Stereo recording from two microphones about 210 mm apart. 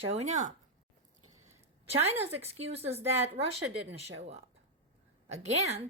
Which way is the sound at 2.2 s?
30° right (ahead or behind).